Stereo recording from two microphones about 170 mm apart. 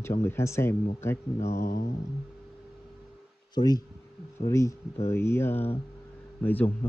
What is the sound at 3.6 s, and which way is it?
Speech, 25° left (ahead or behind).